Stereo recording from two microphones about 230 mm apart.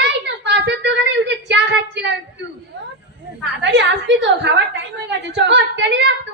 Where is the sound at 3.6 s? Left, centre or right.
Right.